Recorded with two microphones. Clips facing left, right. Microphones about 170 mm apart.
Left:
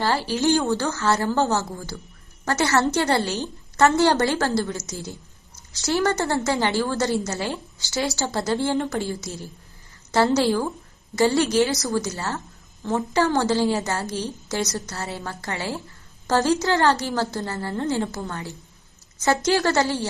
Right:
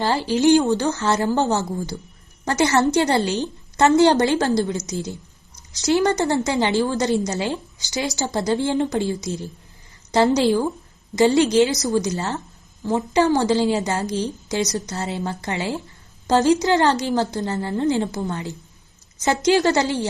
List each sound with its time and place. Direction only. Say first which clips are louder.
0.0 s a woman's voice: right 4 dB; 20° right (ahead or behind)